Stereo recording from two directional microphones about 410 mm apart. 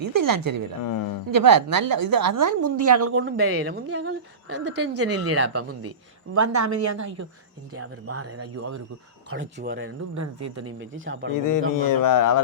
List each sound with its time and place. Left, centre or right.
0.0 s a woman's voice: right
0.8 s speech: left
1.3 s a woman's voice: right
9.3 s speech: right
10.2 s speech: right
11.3 s speech: left